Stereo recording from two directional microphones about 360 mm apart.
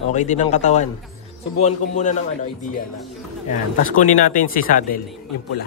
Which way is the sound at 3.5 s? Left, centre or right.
Left.